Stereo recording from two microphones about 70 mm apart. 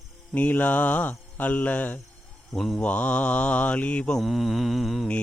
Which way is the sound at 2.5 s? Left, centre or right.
Centre.